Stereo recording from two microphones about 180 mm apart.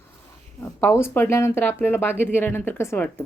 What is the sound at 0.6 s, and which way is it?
A woman's voice, 10° left (ahead or behind).